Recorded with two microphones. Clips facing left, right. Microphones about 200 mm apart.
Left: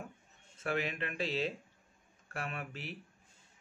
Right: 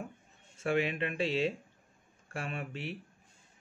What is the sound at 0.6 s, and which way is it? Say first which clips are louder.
Speech: right 5 dB; 30° right (ahead or behind).